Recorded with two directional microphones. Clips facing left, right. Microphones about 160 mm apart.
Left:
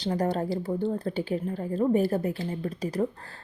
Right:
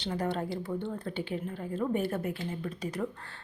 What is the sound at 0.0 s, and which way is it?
A woman's voice, 40° left (ahead or behind).